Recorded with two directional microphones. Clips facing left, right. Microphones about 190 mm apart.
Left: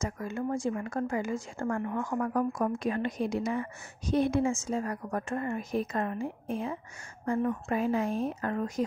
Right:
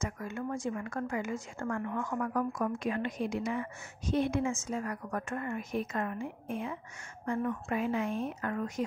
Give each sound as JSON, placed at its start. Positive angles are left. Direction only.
{"t": 0.0, "sound": "a woman's voice", "side_deg": 30}